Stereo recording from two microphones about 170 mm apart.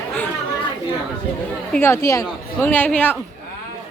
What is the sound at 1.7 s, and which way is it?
Speech, 15° left (ahead or behind).